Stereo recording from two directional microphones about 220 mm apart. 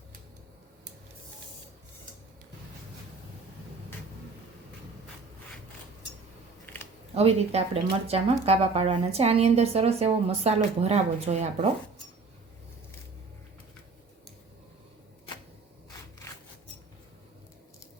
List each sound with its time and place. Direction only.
7.1 s speech: 25° right (ahead or behind)
16.2 s scissors: 10° left (ahead or behind)